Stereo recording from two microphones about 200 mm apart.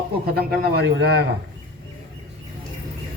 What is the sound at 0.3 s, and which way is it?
Speech, 50° right (ahead or behind).